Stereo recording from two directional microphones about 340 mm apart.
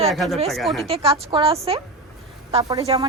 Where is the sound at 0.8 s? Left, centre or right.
Centre.